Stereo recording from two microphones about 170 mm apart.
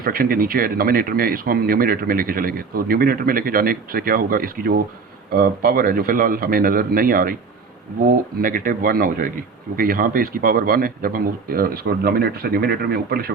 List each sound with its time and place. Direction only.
0.0 s speech: 60° right (ahead or behind)